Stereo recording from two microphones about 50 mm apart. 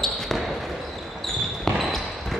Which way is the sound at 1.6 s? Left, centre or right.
Centre.